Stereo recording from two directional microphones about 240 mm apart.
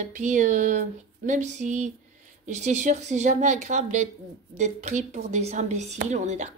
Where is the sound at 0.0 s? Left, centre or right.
Right.